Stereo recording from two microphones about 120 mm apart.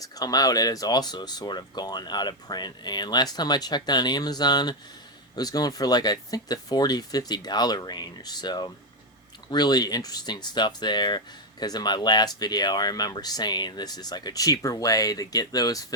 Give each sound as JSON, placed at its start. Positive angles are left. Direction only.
{"t": 0.0, "sound": "speech", "side_deg": 30}